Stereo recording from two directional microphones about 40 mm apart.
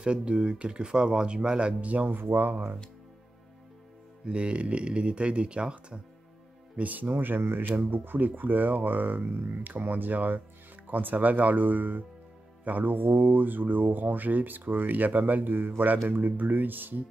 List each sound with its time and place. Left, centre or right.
0.0 s speech: right
2.0 s speech: right
4.3 s speech: right
6.8 s speech: right
7.1 s speech: right